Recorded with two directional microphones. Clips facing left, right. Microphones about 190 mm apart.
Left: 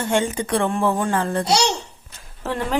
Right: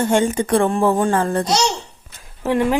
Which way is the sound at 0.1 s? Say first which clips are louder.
Right 4 dB; 45° right (ahead or behind).